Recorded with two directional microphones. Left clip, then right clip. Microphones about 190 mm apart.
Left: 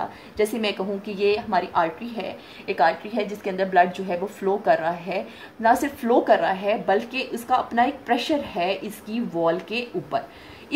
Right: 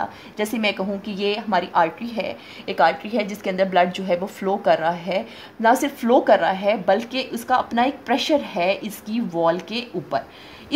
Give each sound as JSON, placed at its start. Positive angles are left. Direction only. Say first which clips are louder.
{"t": 0.4, "sound": "a woman's voice", "louder": "right 1 dB", "side_deg": -40}